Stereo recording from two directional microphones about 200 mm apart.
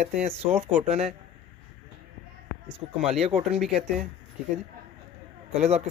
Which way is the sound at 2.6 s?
Centre (ahead or behind).